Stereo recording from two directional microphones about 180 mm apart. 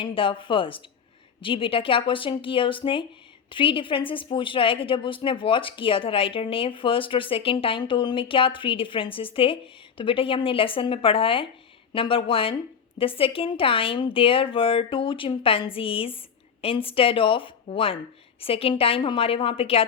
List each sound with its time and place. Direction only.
0.0 s a woman's voice: 30° left (ahead or behind)